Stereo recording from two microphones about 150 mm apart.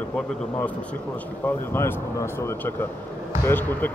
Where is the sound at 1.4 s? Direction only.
15° left (ahead or behind).